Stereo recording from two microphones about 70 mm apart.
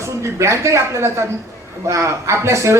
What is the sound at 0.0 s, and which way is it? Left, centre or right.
Speech, right.